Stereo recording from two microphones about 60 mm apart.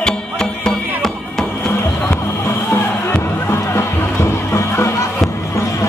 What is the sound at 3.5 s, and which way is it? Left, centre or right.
Music, left.